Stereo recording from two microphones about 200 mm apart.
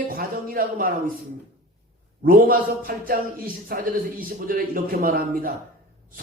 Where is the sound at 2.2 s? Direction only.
45° right (ahead or behind).